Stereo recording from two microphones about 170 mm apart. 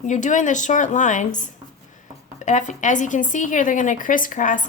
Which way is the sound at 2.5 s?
45° left (ahead or behind).